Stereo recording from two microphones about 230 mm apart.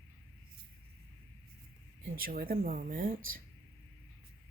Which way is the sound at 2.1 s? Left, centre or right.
Right.